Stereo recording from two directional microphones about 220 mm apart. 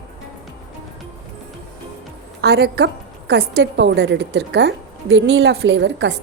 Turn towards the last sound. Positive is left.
turn(degrees=-55)  # may be behind; listen again after turning